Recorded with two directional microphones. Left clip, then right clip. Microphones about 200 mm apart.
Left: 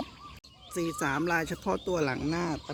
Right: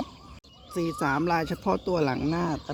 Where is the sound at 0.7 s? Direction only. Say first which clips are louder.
Right 3 dB; 30° right (ahead or behind).